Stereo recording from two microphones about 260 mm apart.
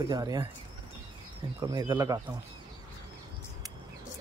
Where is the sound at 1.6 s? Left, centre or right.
Centre.